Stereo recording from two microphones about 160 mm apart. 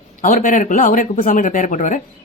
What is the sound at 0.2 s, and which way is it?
Speech, 55° left (ahead or behind).